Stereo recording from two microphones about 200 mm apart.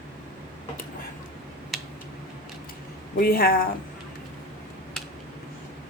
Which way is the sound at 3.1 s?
50° left (ahead or behind).